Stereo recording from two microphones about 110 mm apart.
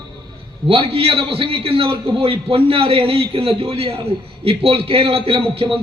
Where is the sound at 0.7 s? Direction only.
60° right (ahead or behind).